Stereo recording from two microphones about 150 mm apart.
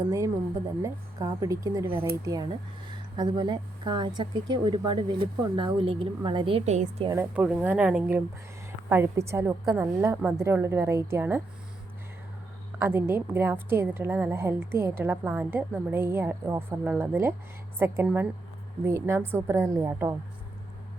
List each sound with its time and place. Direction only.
0.8 s a woman's voice: 20° right (ahead or behind)
7.1 s a woman's voice: 20° right (ahead or behind)
12.8 s a woman's voice: 15° right (ahead or behind)